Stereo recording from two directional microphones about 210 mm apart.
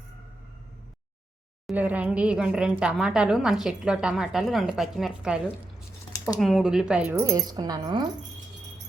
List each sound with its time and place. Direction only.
1.6 s speech: 10° right (ahead or behind)
6.1 s a sound: 15° left (ahead or behind)
6.4 s speech: centre (ahead or behind); by 8.0 s 20° right (ahead or behind)